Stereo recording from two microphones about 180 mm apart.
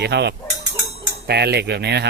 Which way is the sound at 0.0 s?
70° right (ahead or behind).